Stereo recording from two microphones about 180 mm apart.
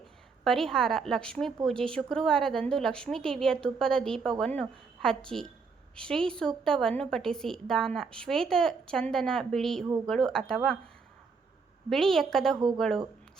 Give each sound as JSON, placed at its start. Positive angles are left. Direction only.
{"t": 0.4, "sound": "a woman's voice", "side_deg": 0}
{"t": 11.9, "sound": "a woman's voice", "side_deg": 0}
{"t": 12.5, "sound": "speech", "side_deg": -25}